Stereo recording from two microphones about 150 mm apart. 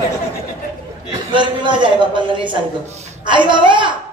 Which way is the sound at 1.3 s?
30° right (ahead or behind).